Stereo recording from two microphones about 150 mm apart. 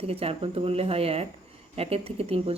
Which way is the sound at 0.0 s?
40° right (ahead or behind).